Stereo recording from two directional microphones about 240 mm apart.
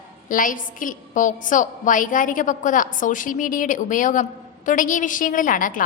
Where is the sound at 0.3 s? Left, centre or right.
Left.